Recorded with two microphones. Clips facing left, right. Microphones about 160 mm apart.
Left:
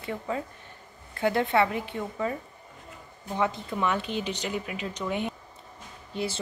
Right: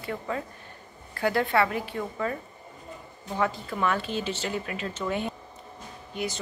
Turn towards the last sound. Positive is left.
turn(degrees=30)  # may be behind; listen again after turning